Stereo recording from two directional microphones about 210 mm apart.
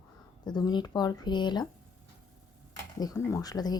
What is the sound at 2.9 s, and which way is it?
Speech, 15° left (ahead or behind).